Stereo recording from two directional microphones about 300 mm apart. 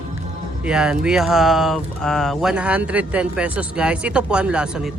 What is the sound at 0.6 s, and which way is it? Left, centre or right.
Speech, centre.